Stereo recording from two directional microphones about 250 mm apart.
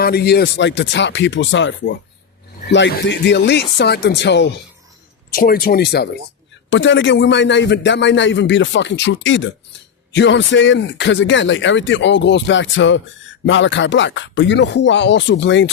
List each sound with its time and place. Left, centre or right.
0.0 s a man's voice: left